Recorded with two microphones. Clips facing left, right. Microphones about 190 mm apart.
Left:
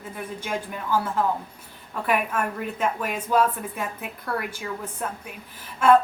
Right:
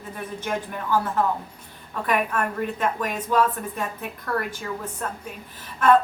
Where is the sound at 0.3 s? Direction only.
10° left (ahead or behind).